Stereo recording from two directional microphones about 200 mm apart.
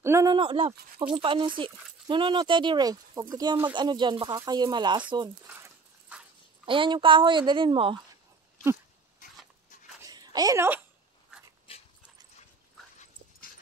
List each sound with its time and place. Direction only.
0.0 s speech: 15° right (ahead or behind)
5.5 s dog: 10° right (ahead or behind)
6.6 s speech: 25° right (ahead or behind)
10.0 s a sound: 20° right (ahead or behind)